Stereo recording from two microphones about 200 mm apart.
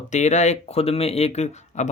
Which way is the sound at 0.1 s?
35° left (ahead or behind).